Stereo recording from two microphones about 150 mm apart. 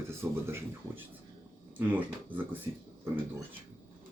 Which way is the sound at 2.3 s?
10° right (ahead or behind).